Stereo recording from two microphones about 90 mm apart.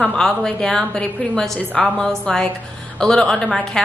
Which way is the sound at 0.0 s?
10° left (ahead or behind).